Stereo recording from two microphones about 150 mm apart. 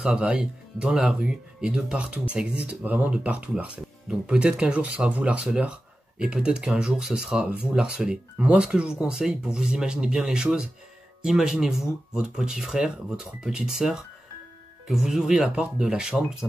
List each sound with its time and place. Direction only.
0.0 s speech: 5° right (ahead or behind)